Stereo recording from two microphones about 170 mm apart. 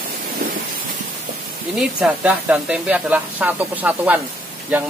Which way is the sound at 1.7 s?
5° right (ahead or behind).